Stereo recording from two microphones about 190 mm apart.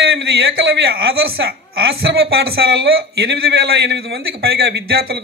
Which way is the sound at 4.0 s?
60° right (ahead or behind).